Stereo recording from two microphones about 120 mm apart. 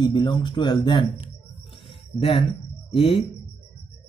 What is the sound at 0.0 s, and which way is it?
Speech, 40° left (ahead or behind).